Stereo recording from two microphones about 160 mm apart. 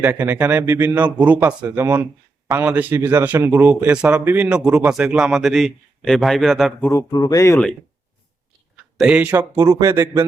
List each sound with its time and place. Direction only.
0.0 s a man's voice: 10° right (ahead or behind)
6.9 s speech: 25° left (ahead or behind)
8.7 s speech: 5° right (ahead or behind)